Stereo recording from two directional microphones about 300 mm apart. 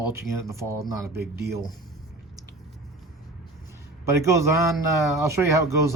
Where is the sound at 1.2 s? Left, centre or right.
Right.